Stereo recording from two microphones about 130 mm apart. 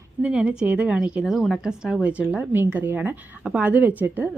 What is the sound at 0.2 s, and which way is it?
A woman's voice, 10° right (ahead or behind).